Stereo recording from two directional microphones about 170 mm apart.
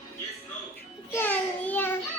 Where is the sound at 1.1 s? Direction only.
10° left (ahead or behind).